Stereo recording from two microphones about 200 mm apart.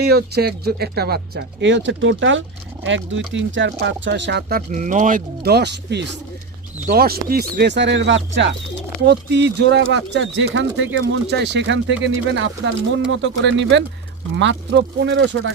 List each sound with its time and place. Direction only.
0.0 s speech: 50° right (ahead or behind); by 10.8 s 70° right (ahead or behind)
11.0 s speech: 60° right (ahead or behind)